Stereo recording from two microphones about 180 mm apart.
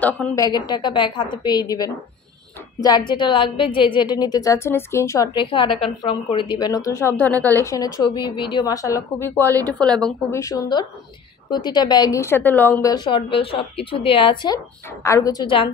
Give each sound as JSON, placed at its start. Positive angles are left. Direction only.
{"t": 0.4, "sound": "a woman's voice", "side_deg": 20}
{"t": 9.7, "sound": "a woman's voice", "side_deg": 5}
{"t": 10.3, "sound": "a woman's voice", "side_deg": 20}
{"t": 12.9, "sound": "a woman's voice", "side_deg": 25}